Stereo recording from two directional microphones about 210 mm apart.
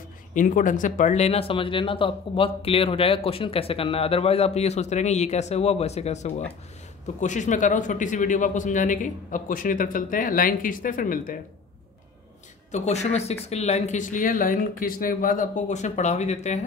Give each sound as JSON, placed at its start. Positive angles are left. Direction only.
{"t": 0.3, "sound": "a man's voice", "side_deg": 40}
{"t": 12.7, "sound": "a man's voice", "side_deg": 30}